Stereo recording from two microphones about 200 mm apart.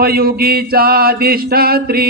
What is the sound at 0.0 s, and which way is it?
Mantra, 50° right (ahead or behind).